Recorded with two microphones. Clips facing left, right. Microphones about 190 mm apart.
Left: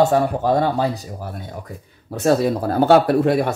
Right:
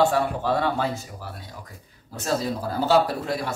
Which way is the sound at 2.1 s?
60° left (ahead or behind).